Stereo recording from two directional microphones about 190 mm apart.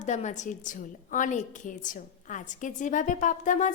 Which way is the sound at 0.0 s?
40° left (ahead or behind).